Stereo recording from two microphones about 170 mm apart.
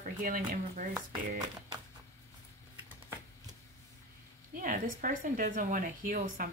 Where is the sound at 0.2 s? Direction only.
50° right (ahead or behind).